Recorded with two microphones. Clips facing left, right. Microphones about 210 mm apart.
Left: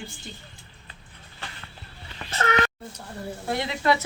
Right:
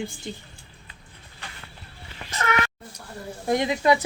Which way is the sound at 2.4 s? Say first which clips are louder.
Left 1 dB; 35° left (ahead or behind).